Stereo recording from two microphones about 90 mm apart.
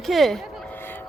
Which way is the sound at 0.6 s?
20° left (ahead or behind).